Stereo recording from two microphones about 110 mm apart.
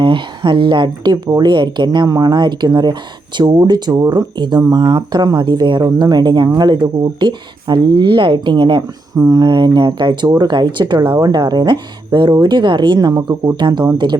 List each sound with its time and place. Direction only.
0.0 s speech: 50° right (ahead or behind)